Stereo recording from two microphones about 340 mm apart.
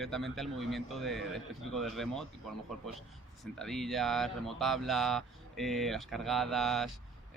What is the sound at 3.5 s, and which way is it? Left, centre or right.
Speech, centre.